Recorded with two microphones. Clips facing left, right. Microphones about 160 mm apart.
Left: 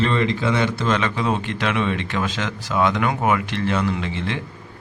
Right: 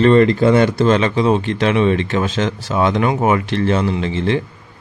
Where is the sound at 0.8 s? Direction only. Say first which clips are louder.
Right 7 dB; 30° right (ahead or behind).